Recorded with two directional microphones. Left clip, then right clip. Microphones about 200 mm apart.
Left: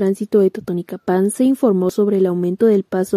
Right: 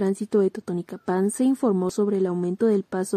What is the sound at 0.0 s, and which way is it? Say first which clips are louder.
A woman's voice: left 7 dB; 20° left (ahead or behind).